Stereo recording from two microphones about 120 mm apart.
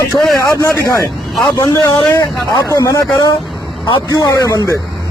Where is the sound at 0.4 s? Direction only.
25° left (ahead or behind).